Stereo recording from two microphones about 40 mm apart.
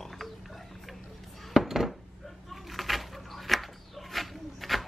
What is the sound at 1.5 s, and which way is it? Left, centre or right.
Dishes, centre.